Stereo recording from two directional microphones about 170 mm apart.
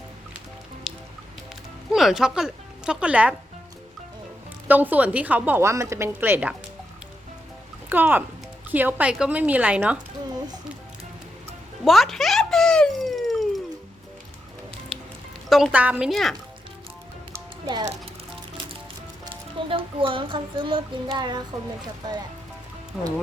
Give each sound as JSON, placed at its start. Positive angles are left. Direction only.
{"t": 0.9, "sound": "music", "side_deg": 0}
{"t": 1.9, "sound": "a woman's voice", "side_deg": 0}
{"t": 4.7, "sound": "a woman's voice", "side_deg": -10}
{"t": 7.9, "sound": "a woman's voice", "side_deg": -10}
{"t": 11.9, "sound": "a sound", "side_deg": 0}
{"t": 15.4, "sound": "a woman's voice", "side_deg": 0}
{"t": 17.3, "sound": "music", "side_deg": -25}
{"t": 19.2, "sound": "speech", "side_deg": -30}